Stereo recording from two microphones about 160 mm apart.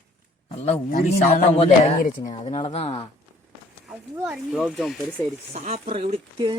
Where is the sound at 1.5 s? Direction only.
35° left (ahead or behind).